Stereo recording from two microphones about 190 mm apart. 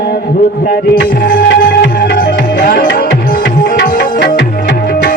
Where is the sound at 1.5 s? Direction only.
65° left (ahead or behind); by 3.9 s 50° left (ahead or behind).